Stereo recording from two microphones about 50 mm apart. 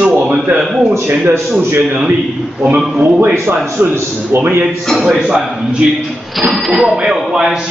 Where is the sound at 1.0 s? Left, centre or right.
Right.